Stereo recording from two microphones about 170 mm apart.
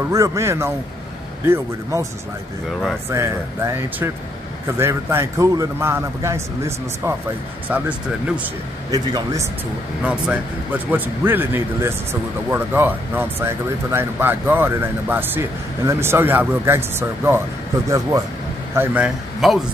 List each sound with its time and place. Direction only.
0.1 s a man's voice: 20° right (ahead or behind)
3.1 s a man's voice: 15° right (ahead or behind)
7.7 s a man's voice: 10° right (ahead or behind)
8.9 s a man's voice: 20° right (ahead or behind)
10.0 s a man's voice: 5° right (ahead or behind)
18.8 s a man's voice: 5° right (ahead or behind)